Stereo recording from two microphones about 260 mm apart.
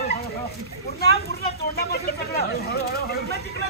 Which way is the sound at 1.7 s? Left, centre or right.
Left.